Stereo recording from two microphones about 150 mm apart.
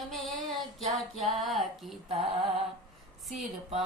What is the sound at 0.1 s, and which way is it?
Female singing, centre (ahead or behind).